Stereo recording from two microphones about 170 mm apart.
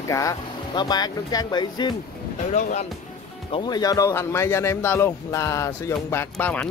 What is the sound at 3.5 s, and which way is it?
Speech, 25° left (ahead or behind).